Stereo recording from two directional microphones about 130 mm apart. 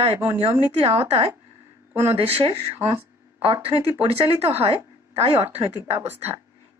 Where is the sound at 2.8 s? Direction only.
15° right (ahead or behind).